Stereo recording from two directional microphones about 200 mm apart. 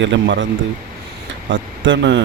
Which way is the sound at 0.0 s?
65° right (ahead or behind).